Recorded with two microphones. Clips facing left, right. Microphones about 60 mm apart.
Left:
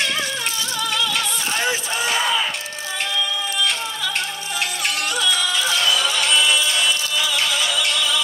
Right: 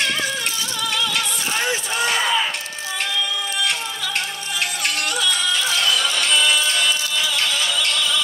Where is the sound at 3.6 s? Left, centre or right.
Centre.